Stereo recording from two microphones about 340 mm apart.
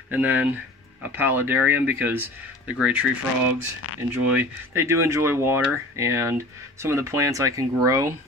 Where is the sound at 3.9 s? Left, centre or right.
Left.